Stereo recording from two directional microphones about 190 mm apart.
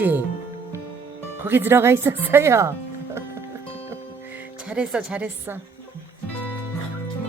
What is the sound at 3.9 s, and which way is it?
Music, 10° right (ahead or behind).